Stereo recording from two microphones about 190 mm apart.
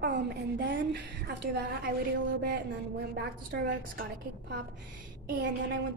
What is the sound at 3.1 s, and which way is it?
Speech, 55° right (ahead or behind).